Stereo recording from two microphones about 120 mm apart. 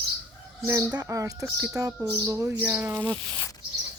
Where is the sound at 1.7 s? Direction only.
25° right (ahead or behind).